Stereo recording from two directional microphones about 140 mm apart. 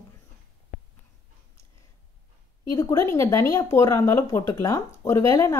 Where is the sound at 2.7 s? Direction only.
25° left (ahead or behind).